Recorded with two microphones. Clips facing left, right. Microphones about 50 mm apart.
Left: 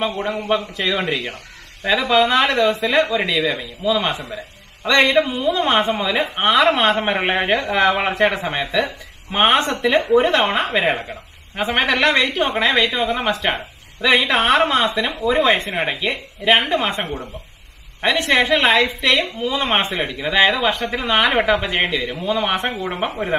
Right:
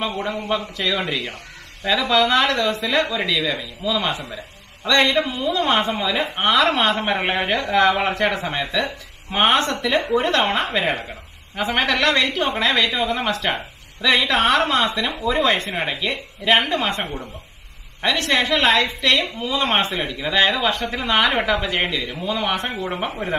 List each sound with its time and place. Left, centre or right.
0.2 s a woman's voice: centre
4.8 s a woman's voice: left
5.1 s a woman's voice: centre
18.0 s a woman's voice: left